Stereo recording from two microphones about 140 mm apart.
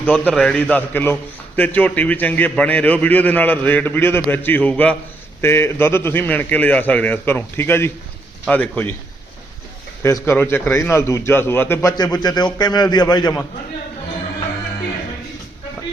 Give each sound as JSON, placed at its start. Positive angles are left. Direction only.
{"t": 0.0, "sound": "a man's voice", "side_deg": 10}
{"t": 10.0, "sound": "a man's voice", "side_deg": 15}